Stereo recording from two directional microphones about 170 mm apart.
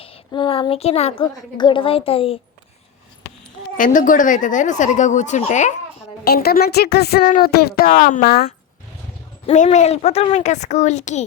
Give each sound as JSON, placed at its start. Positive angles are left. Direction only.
{"t": 0.0, "sound": "a woman's voice", "side_deg": 30}
{"t": 3.8, "sound": "speech", "side_deg": 50}
{"t": 6.2, "sound": "speech", "side_deg": 65}
{"t": 9.5, "sound": "speech", "side_deg": 40}